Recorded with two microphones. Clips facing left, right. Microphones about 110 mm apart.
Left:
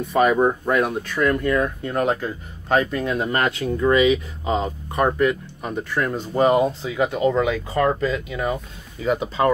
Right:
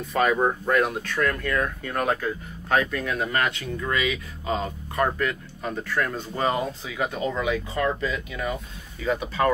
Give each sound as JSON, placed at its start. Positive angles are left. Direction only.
{"t": 0.1, "sound": "speech", "side_deg": 10}
{"t": 6.8, "sound": "speech", "side_deg": 30}
{"t": 7.7, "sound": "speech", "side_deg": 40}